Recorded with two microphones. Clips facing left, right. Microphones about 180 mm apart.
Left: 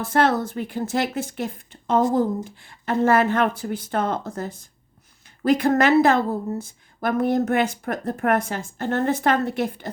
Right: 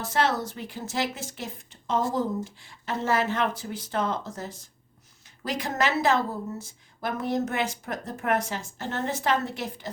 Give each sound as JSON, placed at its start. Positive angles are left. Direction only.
{"t": 0.0, "sound": "speech", "side_deg": 55}